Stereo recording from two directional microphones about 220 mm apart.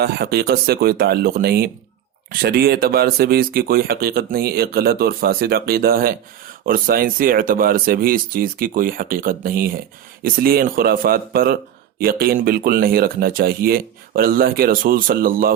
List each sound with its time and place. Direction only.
0.0 s speech: 45° right (ahead or behind)